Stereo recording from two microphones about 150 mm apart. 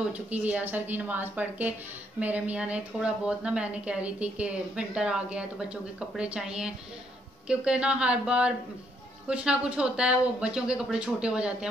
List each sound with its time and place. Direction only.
0.1 s a woman's voice: 10° right (ahead or behind)